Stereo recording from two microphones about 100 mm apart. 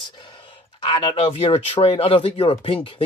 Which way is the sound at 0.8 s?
65° left (ahead or behind).